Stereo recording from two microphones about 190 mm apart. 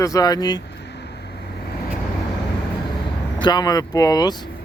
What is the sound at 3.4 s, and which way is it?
Speech, 20° left (ahead or behind).